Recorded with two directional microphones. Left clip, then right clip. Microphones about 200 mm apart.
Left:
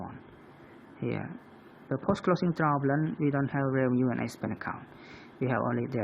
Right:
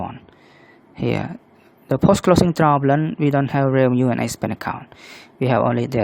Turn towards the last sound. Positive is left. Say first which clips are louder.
# right 12 dB
turn(degrees=-60)  # may be behind; listen again after turning